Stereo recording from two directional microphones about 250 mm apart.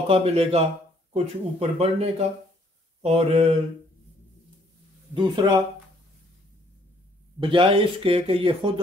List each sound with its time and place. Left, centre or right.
0.1 s speech: right
5.1 s speech: centre
7.4 s speech: right